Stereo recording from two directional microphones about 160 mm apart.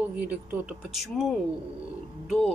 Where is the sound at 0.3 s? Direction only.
10° right (ahead or behind).